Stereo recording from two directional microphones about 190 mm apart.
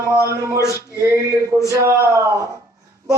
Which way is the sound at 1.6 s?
15° right (ahead or behind).